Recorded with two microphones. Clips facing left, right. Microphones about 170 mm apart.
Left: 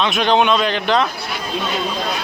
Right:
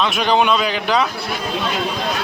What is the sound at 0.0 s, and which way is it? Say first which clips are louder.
A man's voice: left 1 dB; 5° right (ahead or behind).